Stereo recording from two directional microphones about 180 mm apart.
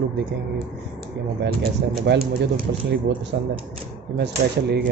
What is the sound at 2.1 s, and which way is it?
Speech, 70° right (ahead or behind).